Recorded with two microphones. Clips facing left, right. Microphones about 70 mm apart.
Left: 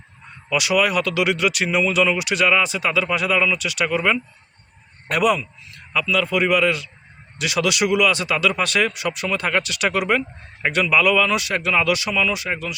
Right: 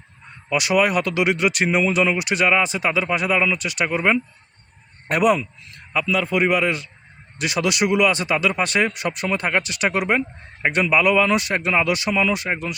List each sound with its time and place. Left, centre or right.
0.5 s speech: right